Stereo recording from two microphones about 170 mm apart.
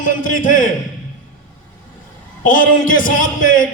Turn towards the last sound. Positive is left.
turn(degrees=55)  # may be behind; listen again after turning